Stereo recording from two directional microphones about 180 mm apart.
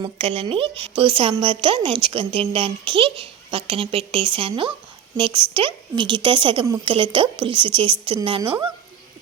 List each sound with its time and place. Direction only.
0.0 s a woman's voice: 30° right (ahead or behind)